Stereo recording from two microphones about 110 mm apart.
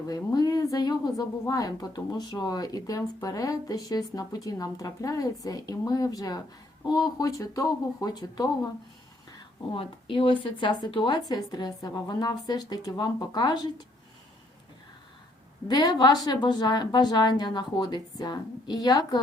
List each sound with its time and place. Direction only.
0.3 s speech: 35° left (ahead or behind)
9.7 s speech: 50° left (ahead or behind)
15.6 s speech: 35° left (ahead or behind)